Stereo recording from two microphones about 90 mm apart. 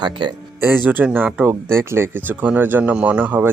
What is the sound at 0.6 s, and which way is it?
Speech, 25° right (ahead or behind).